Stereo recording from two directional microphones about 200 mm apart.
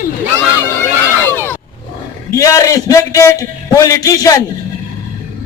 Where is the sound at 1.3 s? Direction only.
10° left (ahead or behind).